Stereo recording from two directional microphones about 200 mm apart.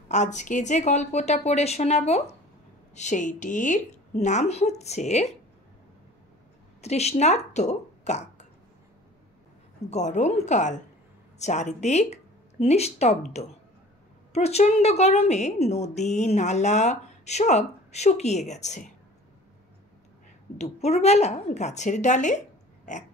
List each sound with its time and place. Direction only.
0.1 s a woman's voice: 35° left (ahead or behind)
6.8 s speech: 35° left (ahead or behind)
9.8 s a woman's voice: 35° left (ahead or behind)
14.3 s a woman's voice: 30° left (ahead or behind)
20.5 s a woman's voice: 30° left (ahead or behind)